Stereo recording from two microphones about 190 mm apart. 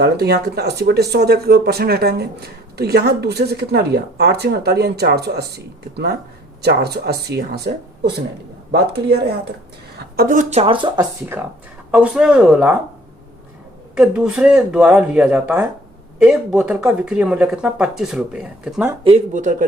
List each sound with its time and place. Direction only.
0.0 s speech: 60° right (ahead or behind)
6.6 s speech: 60° right (ahead or behind)
10.2 s speech: 45° right (ahead or behind); by 11.0 s 25° right (ahead or behind)
11.9 s speech: 5° right (ahead or behind)
13.9 s speech: 5° right (ahead or behind)
19.0 s speech: 35° right (ahead or behind)